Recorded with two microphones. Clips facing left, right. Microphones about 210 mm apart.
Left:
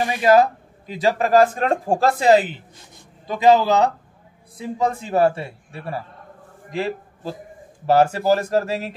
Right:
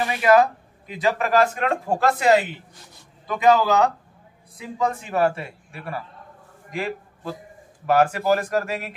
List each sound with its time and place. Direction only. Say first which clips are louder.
0.0 s a man's voice: left 2 dB; 30° left (ahead or behind)